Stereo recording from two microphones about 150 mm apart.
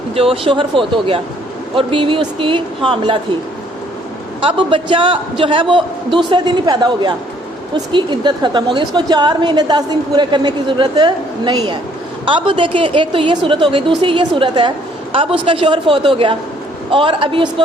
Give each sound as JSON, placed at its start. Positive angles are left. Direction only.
{"t": 0.2, "sound": "a man's voice", "side_deg": -40}
{"t": 4.4, "sound": "a man's voice", "side_deg": -35}